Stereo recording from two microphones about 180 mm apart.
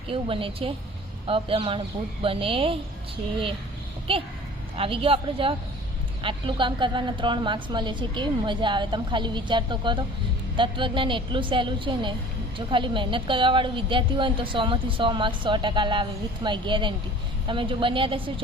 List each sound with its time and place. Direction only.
0.1 s a woman's voice: 30° right (ahead or behind)
4.1 s a woman's voice: 30° right (ahead or behind)